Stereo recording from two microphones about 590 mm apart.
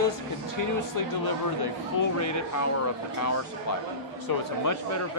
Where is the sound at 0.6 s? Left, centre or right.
Left.